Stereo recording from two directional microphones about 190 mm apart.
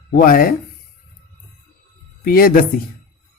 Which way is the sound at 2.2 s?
50° left (ahead or behind).